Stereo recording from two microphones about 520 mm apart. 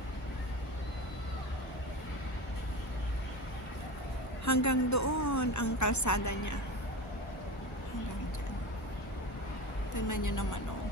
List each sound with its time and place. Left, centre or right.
4.5 s a woman's voice: left
9.9 s a woman's voice: left